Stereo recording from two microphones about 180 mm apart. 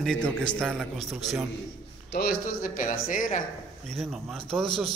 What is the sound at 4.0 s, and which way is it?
Speech, centre (ahead or behind).